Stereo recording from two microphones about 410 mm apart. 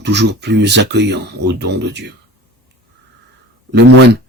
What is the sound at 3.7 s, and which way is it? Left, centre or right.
Speech, right.